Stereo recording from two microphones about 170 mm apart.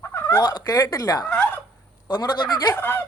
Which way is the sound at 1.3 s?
10° left (ahead or behind).